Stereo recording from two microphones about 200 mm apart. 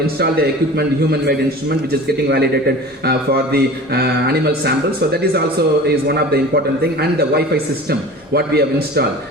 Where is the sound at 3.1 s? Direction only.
50° right (ahead or behind).